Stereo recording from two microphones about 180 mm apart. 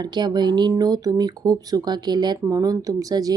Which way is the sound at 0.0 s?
25° right (ahead or behind).